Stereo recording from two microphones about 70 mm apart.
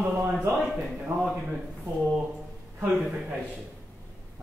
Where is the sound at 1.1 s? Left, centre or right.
Right.